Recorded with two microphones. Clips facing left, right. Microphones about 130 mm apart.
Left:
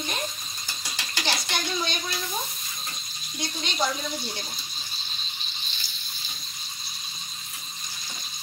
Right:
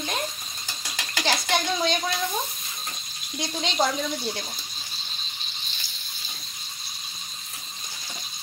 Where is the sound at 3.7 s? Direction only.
90° right.